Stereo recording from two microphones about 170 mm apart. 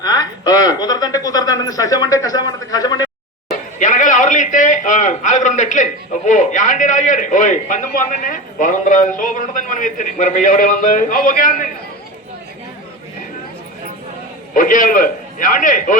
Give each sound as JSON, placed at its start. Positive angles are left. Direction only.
{"t": 0.0, "sound": "a sound", "side_deg": 25}
{"t": 3.8, "sound": "a man's voice", "side_deg": 45}
{"t": 14.5, "sound": "a man's voice", "side_deg": 50}